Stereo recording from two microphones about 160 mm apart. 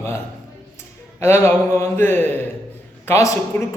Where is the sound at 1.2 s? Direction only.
15° left (ahead or behind).